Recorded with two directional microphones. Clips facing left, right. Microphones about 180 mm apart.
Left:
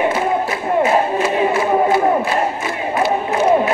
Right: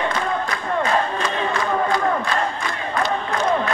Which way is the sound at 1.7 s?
25° left (ahead or behind).